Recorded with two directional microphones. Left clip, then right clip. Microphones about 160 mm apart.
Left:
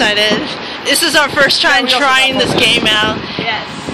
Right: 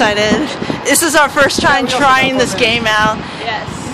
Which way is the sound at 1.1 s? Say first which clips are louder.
Even; 15° right (ahead or behind).